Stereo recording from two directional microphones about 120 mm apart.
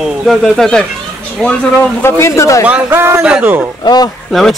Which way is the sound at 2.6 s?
15° right (ahead or behind).